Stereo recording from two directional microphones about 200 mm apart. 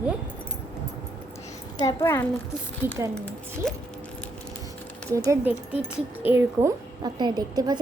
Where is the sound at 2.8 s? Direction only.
10° right (ahead or behind).